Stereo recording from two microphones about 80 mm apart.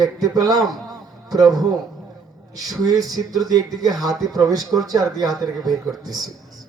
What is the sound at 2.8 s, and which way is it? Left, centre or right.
Speech, right.